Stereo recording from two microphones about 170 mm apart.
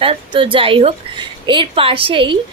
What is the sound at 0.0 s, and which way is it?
A woman's voice, 30° right (ahead or behind).